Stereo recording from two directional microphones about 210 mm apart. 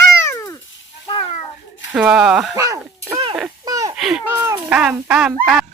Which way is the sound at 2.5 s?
15° right (ahead or behind).